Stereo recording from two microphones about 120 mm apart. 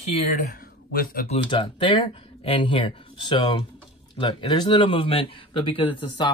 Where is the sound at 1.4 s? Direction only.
45° left (ahead or behind).